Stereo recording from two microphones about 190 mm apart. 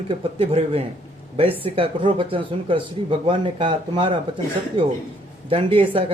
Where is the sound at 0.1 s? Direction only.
30° right (ahead or behind).